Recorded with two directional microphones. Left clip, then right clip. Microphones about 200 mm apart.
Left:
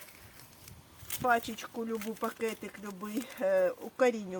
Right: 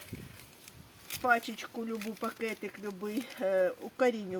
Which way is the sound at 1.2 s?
Centre (ahead or behind).